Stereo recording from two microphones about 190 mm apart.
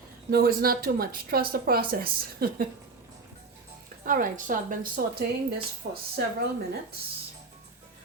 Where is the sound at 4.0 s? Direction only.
45° right (ahead or behind).